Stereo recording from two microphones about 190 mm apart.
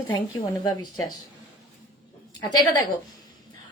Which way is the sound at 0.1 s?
20° left (ahead or behind).